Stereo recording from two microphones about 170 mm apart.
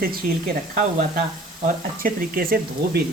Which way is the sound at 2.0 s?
60° right (ahead or behind).